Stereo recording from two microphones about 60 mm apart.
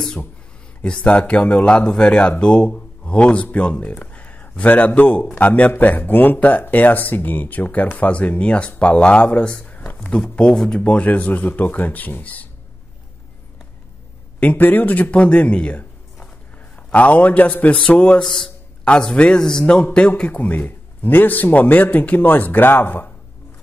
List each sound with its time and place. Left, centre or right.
0.8 s a man's voice: centre
9.6 s a sound: left
10.4 s speech: centre
10.8 s a man's voice: left
14.4 s a man's voice: left
18.2 s a man's voice: centre; by 23.1 s left